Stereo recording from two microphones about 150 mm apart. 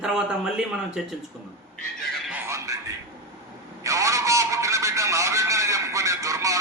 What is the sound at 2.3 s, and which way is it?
Music, 20° right (ahead or behind).